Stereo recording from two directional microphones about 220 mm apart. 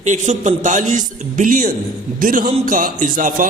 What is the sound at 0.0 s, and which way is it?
A man's voice, 35° right (ahead or behind).